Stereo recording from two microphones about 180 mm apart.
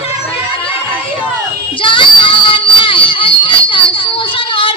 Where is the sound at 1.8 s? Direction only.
30° left (ahead or behind).